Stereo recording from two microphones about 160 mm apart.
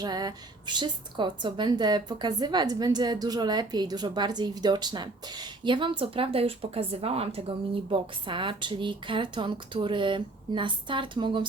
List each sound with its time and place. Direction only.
0.0 s a woman's voice: 25° right (ahead or behind)